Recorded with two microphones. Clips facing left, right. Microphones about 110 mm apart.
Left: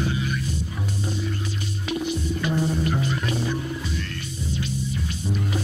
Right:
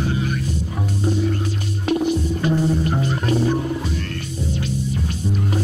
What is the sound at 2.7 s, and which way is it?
Music, 35° right (ahead or behind).